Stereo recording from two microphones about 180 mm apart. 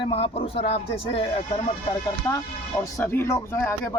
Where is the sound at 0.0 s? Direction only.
30° left (ahead or behind).